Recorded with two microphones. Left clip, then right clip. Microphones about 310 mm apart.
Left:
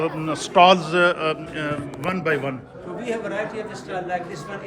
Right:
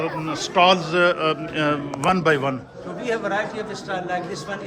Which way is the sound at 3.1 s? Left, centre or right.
Right.